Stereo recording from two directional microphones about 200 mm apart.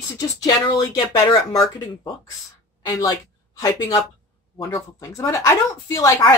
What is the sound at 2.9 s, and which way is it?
Speech, 15° left (ahead or behind).